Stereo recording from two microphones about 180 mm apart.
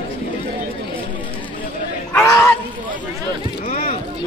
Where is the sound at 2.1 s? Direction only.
15° left (ahead or behind).